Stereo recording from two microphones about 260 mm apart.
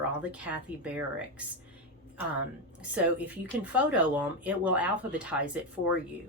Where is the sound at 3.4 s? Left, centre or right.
Centre.